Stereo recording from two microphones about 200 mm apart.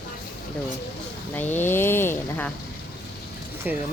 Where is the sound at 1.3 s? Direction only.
10° left (ahead or behind).